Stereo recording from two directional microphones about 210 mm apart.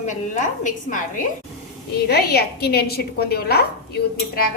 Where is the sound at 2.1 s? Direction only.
50° left (ahead or behind).